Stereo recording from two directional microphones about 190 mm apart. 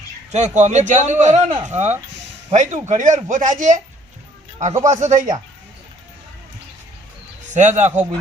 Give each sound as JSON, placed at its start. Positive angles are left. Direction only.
{"t": 0.3, "sound": "a man's voice", "side_deg": -35}
{"t": 4.9, "sound": "a man's voice", "side_deg": -40}
{"t": 7.5, "sound": "a man's voice", "side_deg": -40}